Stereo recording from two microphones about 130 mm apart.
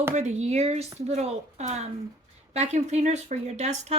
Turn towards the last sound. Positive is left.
turn(degrees=-60)  # may be behind; listen again after turning